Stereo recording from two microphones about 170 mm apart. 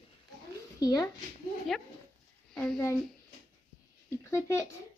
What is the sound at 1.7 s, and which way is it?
Speech, centre (ahead or behind).